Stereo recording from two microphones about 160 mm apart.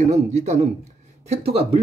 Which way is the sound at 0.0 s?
50° right (ahead or behind).